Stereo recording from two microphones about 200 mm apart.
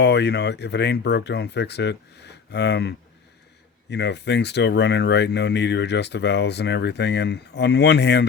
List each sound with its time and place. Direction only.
0.0 s speech: 60° left (ahead or behind)